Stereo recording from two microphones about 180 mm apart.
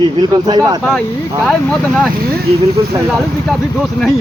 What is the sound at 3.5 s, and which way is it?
Speech, centre (ahead or behind).